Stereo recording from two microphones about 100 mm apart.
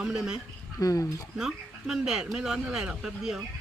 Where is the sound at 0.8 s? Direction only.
35° left (ahead or behind).